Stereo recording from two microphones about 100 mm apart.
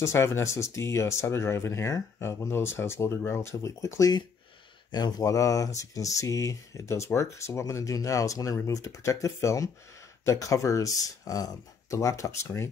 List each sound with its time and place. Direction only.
0.0 s speech: 30° left (ahead or behind)
4.9 s speech: 40° left (ahead or behind)